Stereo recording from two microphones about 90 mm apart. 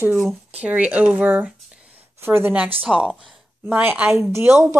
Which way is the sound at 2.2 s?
25° right (ahead or behind).